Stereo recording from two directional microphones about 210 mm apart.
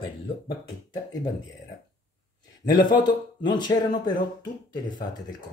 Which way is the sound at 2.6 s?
20° left (ahead or behind).